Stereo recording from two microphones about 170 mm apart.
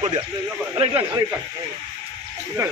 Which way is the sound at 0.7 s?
35° right (ahead or behind).